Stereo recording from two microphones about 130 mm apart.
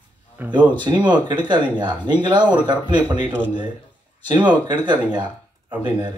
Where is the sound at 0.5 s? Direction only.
35° right (ahead or behind).